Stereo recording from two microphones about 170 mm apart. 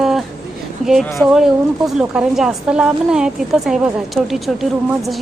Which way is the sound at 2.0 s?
5° right (ahead or behind).